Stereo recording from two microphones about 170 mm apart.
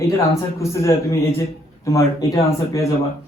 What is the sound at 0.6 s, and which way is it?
A man's voice, 15° left (ahead or behind).